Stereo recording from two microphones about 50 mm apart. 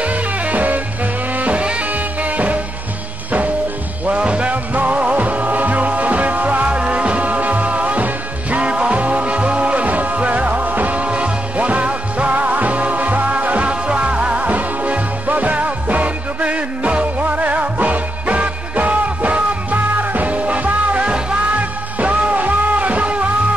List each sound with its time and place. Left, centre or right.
0.0 s music: right
4.0 s music: right